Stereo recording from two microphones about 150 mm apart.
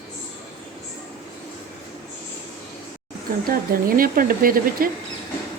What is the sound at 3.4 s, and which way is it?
Speech, 70° right (ahead or behind).